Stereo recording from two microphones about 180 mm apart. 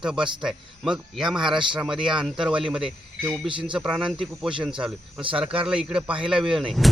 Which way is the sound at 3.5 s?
25° right (ahead or behind).